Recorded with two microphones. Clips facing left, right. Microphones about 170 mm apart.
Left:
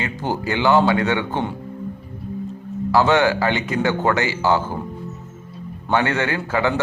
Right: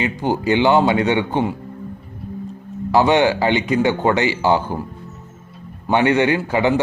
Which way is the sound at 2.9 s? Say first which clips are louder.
Right 2 dB; 20° right (ahead or behind).